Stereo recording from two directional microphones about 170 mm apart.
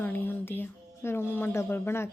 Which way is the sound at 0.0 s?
10° left (ahead or behind).